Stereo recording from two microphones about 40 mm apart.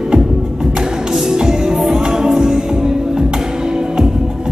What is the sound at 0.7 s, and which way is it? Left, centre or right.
Music, centre.